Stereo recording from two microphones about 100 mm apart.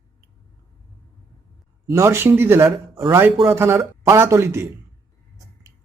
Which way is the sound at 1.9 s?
30° right (ahead or behind).